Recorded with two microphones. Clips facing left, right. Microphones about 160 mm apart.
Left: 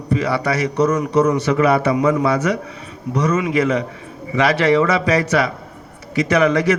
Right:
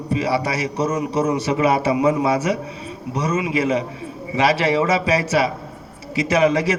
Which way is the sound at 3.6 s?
30° right (ahead or behind).